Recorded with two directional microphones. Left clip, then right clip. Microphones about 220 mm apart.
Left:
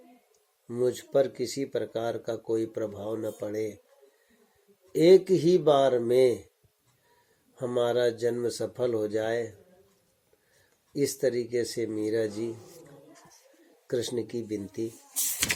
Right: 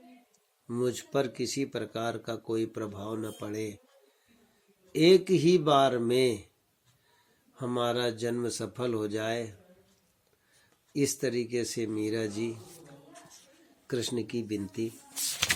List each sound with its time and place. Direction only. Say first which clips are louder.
0.7 s speech: left 4 dB; 35° right (ahead or behind)
4.9 s speech: left 3 dB; 35° right (ahead or behind)
7.5 s speech: left 4 dB; 40° right (ahead or behind)
10.9 s speech: left 3 dB; 35° right (ahead or behind)
13.8 s speech: left 3 dB; 35° right (ahead or behind)